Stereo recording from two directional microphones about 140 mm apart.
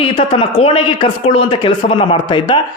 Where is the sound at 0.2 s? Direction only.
40° left (ahead or behind).